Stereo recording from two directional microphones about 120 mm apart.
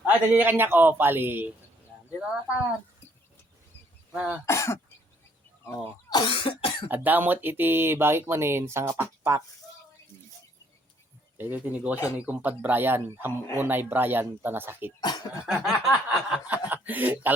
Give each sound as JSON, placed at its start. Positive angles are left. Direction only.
{"t": 0.0, "sound": "speech", "side_deg": -15}
{"t": 4.1, "sound": "speech", "side_deg": -10}
{"t": 4.4, "sound": "speech", "side_deg": 25}
{"t": 6.1, "sound": "cough", "side_deg": 45}
{"t": 6.9, "sound": "speech", "side_deg": -15}
{"t": 11.3, "sound": "speech", "side_deg": -15}
{"t": 15.0, "sound": "speech", "side_deg": 35}
{"t": 15.4, "sound": "speech", "side_deg": 0}